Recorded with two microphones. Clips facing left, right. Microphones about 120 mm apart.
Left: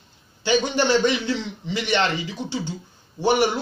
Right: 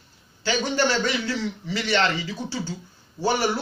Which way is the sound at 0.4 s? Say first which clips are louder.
Left 3 dB; 20° left (ahead or behind).